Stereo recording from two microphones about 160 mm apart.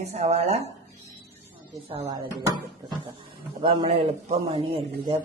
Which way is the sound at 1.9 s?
40° right (ahead or behind).